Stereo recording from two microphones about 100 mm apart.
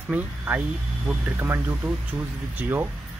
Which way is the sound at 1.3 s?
25° right (ahead or behind).